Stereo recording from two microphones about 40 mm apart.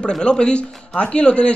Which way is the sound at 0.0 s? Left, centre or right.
Left.